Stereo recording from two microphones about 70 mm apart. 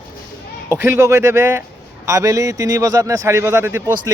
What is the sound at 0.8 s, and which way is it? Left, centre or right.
Speech, right.